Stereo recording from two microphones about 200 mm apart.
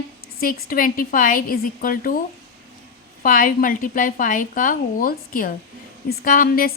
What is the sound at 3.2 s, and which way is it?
A woman's voice, 45° left (ahead or behind).